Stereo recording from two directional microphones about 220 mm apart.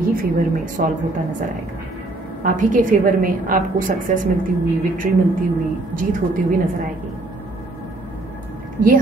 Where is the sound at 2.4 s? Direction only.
35° right (ahead or behind).